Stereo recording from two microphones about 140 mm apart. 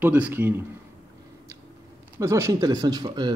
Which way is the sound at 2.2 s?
20° right (ahead or behind).